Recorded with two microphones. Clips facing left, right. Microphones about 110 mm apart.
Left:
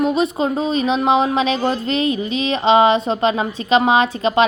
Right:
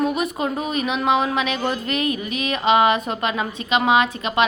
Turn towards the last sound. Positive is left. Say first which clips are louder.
# left 4 dB
turn(degrees=30)  # may be behind; listen again after turning